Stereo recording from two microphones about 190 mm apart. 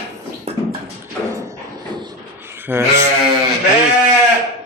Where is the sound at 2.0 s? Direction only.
20° right (ahead or behind).